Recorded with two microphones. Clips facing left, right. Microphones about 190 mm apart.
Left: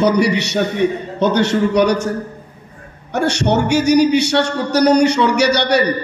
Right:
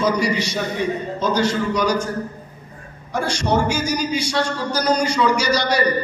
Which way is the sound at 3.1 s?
70° left (ahead or behind).